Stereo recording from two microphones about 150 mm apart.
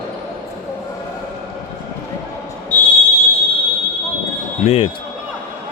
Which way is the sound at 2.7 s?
10° left (ahead or behind).